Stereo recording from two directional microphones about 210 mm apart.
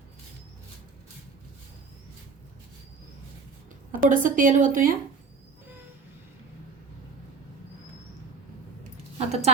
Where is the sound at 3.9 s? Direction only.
40° right (ahead or behind).